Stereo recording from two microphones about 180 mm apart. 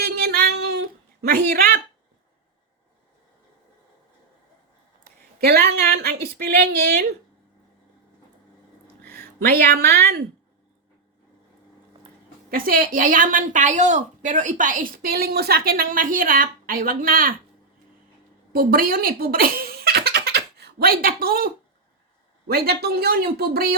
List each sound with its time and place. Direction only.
0.0 s a sound: 60° right (ahead or behind)
5.0 s a woman's voice: 60° right (ahead or behind)
9.0 s speech: 60° right (ahead or behind)
12.5 s a woman's voice: 50° right (ahead or behind)
18.5 s speech: 55° right (ahead or behind)